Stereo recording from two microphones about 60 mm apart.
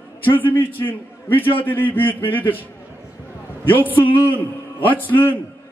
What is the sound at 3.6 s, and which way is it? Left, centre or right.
A man's voice, left.